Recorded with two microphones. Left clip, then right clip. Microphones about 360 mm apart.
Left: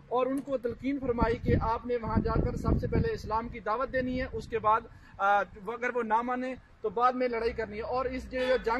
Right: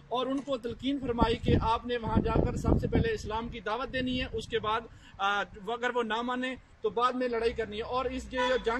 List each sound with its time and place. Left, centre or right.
0.1 s a man's voice: centre